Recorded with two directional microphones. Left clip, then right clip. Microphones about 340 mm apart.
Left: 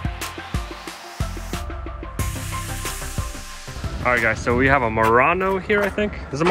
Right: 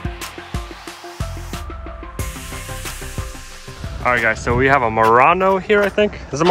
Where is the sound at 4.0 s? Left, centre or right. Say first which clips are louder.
Right 3 dB; centre.